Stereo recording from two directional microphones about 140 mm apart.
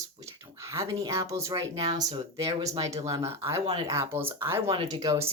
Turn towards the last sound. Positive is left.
turn(degrees=-25)  # may be behind; listen again after turning